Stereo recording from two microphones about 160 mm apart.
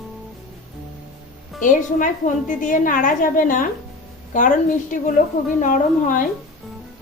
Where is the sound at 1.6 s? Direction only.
55° left (ahead or behind).